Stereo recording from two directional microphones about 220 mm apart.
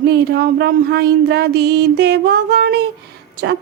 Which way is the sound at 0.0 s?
45° right (ahead or behind).